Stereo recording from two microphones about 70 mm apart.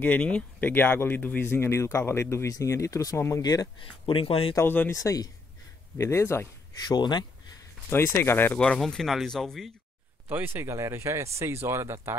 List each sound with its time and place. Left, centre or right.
0.0 s speech: left
1.5 s speech: left
4.6 s speech: left
4.9 s speech: left
5.9 s speech: left
6.9 s speech: left
7.9 s speech: left
8.5 s speech: centre
10.3 s speech: right